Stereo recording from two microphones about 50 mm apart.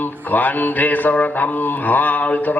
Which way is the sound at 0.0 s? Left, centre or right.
Left.